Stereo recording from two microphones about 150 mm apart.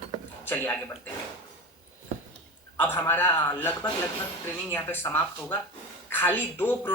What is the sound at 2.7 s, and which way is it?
Speech, 15° left (ahead or behind).